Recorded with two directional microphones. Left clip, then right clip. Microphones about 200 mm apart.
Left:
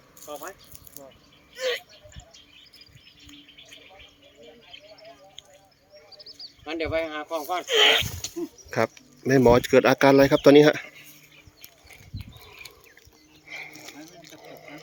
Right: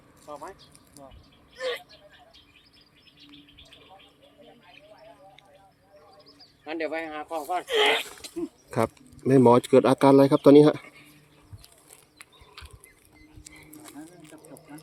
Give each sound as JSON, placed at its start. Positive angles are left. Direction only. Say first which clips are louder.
{"t": 0.3, "sound": "speech", "louder": "left 2 dB", "side_deg": 45}
{"t": 1.5, "sound": "a sound", "louder": "left 3 dB", "side_deg": 0}
{"t": 6.7, "sound": "speech", "louder": "left 3 dB", "side_deg": 50}
{"t": 7.6, "sound": "speech", "louder": "left 4 dB", "side_deg": -10}
{"t": 8.2, "sound": "wild animals", "louder": "left 4 dB", "side_deg": -20}
{"t": 8.7, "sound": "speech", "louder": "left 2 dB", "side_deg": -10}
{"t": 13.5, "sound": "a sound", "louder": "left 9 dB", "side_deg": 10}